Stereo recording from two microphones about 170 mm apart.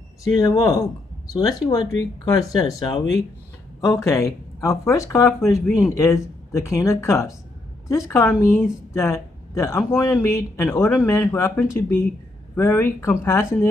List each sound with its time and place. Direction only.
0.2 s speech: 20° left (ahead or behind)